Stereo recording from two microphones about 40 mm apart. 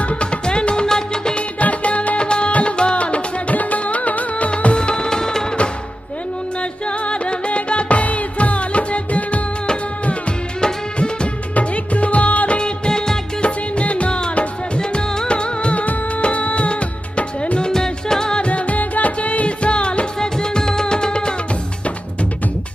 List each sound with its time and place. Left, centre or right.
0.0 s music: left
1.6 s music: left
4.5 s music of bollywood: left
4.7 s music: centre
6.6 s music: left
10.6 s music: left
11.5 s music: left
12.5 s music of bollywood: left
13.4 s music: left
18.5 s music: left